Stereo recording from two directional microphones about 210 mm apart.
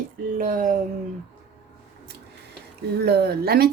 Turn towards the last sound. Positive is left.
turn(degrees=-45)  # may be behind; listen again after turning